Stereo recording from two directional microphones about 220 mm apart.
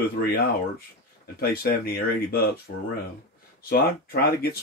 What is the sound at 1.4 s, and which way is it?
Speech, 45° left (ahead or behind).